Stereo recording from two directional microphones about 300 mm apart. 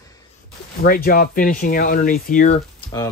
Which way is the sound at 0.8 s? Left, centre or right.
Left.